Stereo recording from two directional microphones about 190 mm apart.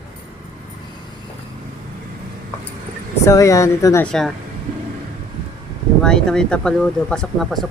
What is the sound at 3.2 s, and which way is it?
Speech, 15° left (ahead or behind).